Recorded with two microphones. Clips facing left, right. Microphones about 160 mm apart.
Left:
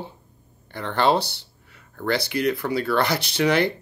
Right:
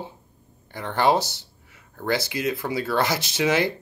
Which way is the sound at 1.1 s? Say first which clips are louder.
Even; 65° left (ahead or behind).